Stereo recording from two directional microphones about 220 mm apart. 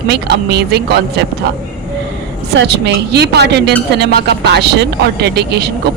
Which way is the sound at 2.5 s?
50° right (ahead or behind).